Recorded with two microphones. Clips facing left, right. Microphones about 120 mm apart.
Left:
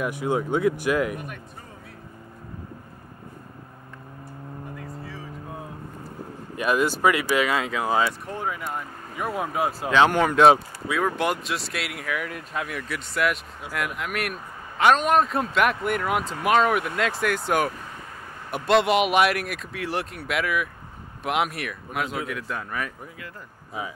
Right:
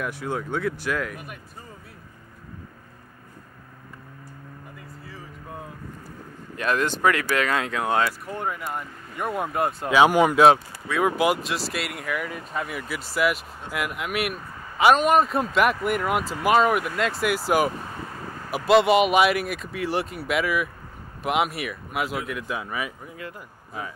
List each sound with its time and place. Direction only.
0.0 s speech: 15° left (ahead or behind)
1.1 s speech: 5° right (ahead or behind)
4.7 s vehicle: centre (ahead or behind)
6.5 s speech: 10° left (ahead or behind)
9.9 s speech: 10° right (ahead or behind)
10.5 s speech: 5° left (ahead or behind)